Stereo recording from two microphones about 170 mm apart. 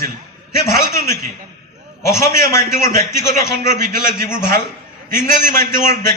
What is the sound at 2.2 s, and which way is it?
Speech, 15° left (ahead or behind).